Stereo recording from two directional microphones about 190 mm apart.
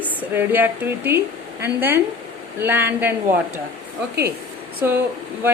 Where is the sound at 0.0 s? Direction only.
10° right (ahead or behind).